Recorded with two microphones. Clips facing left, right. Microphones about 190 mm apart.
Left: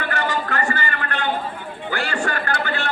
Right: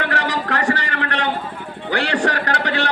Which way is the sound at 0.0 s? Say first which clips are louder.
Right 2 dB; 80° right.